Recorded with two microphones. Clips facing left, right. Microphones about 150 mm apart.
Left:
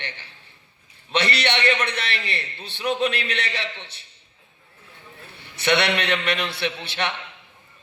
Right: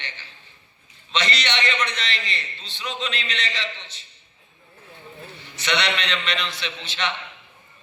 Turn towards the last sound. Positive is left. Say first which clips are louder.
# left 3 dB
turn(degrees=60)  # may be behind; listen again after turning